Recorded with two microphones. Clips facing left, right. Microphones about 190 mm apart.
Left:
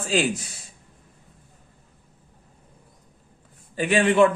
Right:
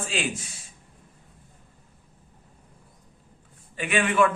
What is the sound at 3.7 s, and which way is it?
Speech, 35° left (ahead or behind).